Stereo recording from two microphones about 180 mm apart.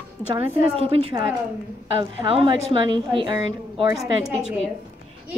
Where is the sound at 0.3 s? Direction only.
30° right (ahead or behind).